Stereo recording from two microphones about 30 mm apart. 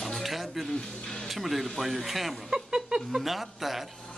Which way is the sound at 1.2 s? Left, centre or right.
Centre.